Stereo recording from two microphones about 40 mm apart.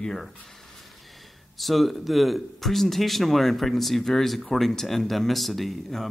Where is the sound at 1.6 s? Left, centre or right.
Centre.